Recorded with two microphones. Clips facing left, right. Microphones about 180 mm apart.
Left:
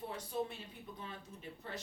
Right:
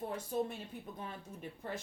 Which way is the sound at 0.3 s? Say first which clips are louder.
Right 3 dB; 50° right (ahead or behind).